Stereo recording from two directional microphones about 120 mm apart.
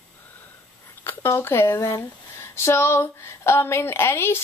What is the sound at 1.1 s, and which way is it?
Speech, 20° left (ahead or behind).